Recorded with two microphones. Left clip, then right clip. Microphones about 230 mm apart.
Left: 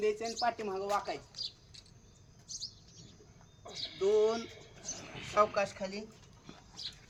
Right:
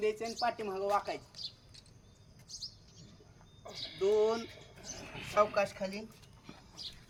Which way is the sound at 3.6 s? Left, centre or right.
Centre.